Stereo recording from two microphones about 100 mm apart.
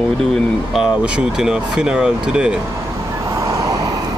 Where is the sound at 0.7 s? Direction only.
10° right (ahead or behind).